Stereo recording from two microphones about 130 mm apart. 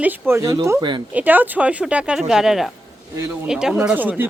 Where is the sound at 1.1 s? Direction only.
15° right (ahead or behind).